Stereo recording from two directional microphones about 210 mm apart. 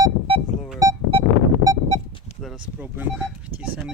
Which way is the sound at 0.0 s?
25° right (ahead or behind).